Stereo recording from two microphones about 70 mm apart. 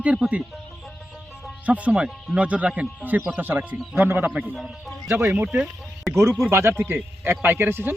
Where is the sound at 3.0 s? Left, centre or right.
Right.